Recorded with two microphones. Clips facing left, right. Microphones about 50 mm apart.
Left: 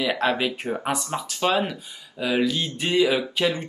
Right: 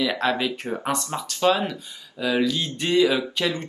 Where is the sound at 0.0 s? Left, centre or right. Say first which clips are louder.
Even; centre.